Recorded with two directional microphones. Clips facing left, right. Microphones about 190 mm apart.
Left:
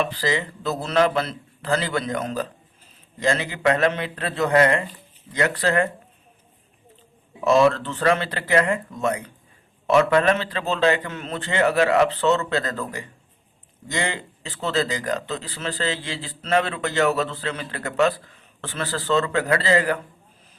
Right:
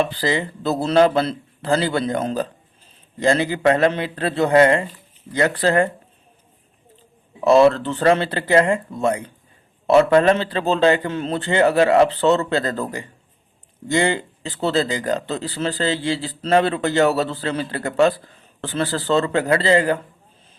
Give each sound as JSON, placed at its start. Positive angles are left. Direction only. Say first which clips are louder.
{"t": 0.0, "sound": "speech", "louder": "right 3 dB", "side_deg": -30}
{"t": 7.4, "sound": "speech", "louder": "right 4 dB", "side_deg": -35}